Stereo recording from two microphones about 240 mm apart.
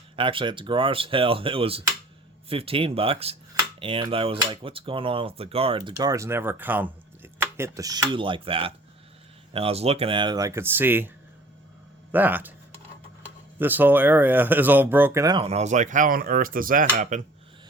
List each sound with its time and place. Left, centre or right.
0.2 s speech: right
12.1 s speech: centre
13.6 s speech: centre; by 17.2 s right